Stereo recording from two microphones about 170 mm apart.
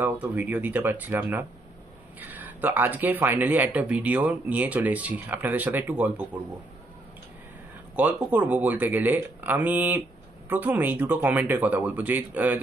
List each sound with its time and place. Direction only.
0.0 s speech: 10° right (ahead or behind)
7.9 s speech: 10° right (ahead or behind)